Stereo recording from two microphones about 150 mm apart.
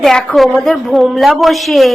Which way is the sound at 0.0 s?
5° left (ahead or behind).